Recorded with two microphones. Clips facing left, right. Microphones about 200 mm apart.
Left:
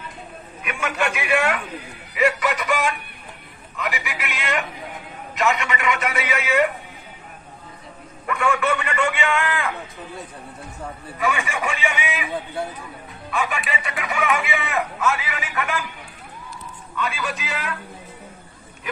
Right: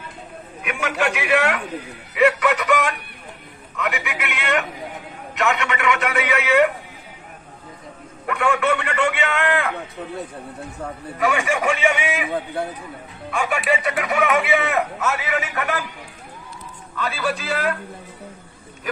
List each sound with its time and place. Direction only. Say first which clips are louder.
0.6 s a man's voice: right 2 dB; 70° right (ahead or behind)
2.1 s a sound: right 4 dB; 65° right (ahead or behind)
5.4 s a man's voice: right 1 dB; 65° right (ahead or behind)
8.3 s a sound: right 2 dB; 65° right (ahead or behind)
10.8 s speech: right 3 dB; 70° right (ahead or behind)
11.5 s a man's voice: right 5 dB; 55° right (ahead or behind)
14.8 s a man's voice: right 1 dB; 40° right (ahead or behind)
17.0 s a man's voice: right 3 dB; 40° right (ahead or behind)